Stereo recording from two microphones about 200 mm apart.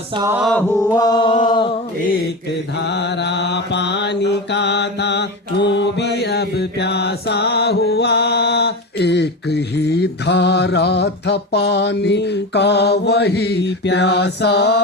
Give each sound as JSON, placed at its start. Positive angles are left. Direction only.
{"t": 0.1, "sound": "mantra", "side_deg": -20}
{"t": 0.3, "sound": "chant", "side_deg": 5}
{"t": 2.8, "sound": "mantra", "side_deg": 60}